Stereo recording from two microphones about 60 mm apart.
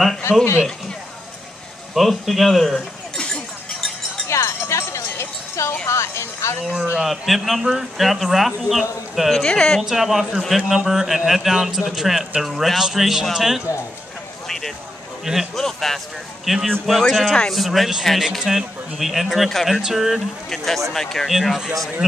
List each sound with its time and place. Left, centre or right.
0.3 s speech: left
2.0 s a man's voice: centre
4.3 s a sound: left
6.6 s speech: centre
7.0 s a man's voice: centre
9.4 s a woman's voice: centre
9.8 s a man's voice: centre
10.4 s a woman's voice: centre
10.7 s a man's voice: centre
15.2 s a man's voice: centre
15.6 s a man's voice: centre
21.3 s a man's voice: centre